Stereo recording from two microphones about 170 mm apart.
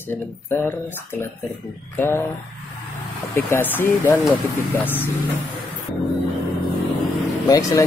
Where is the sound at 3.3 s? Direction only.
10° left (ahead or behind).